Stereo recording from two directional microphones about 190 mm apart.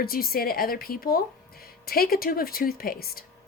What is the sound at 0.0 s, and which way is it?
Speech, 50° left (ahead or behind).